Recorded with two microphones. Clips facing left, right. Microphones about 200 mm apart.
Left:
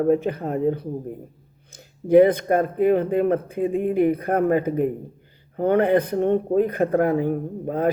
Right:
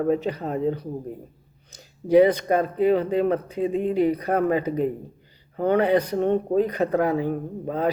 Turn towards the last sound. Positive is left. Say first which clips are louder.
# left 2 dB
turn(degrees=50)  # may be behind; listen again after turning